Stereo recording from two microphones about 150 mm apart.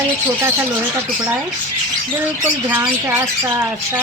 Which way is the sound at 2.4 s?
15° right (ahead or behind).